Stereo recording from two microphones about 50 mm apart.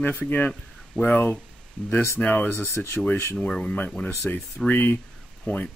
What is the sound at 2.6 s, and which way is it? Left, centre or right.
Speech, left.